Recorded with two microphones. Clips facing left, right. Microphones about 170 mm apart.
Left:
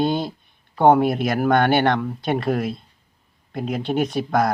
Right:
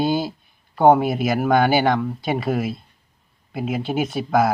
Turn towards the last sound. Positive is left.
turn(degrees=0)  # may be behind; listen again after turning